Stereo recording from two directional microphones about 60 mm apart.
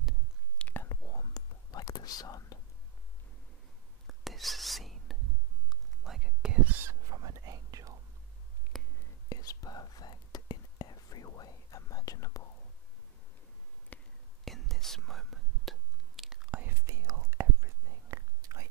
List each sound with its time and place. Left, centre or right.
0.8 s whispering: left
4.1 s whispering: centre
7.1 s whispering: right
8.7 s whispering: centre
9.3 s whispering: left
13.9 s whispering: left
14.4 s whispering: centre
16.6 s whispering: right